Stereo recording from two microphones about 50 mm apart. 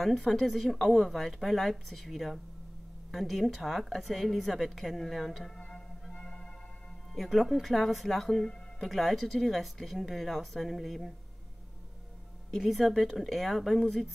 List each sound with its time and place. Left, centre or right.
0.0 s speech: centre
5.6 s music: centre
7.2 s speech: centre
12.5 s speech: centre